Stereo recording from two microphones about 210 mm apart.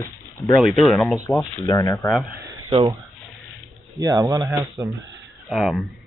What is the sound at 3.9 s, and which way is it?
Speech, 15° right (ahead or behind).